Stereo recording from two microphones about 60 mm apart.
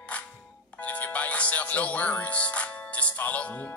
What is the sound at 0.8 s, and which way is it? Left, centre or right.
Music, left.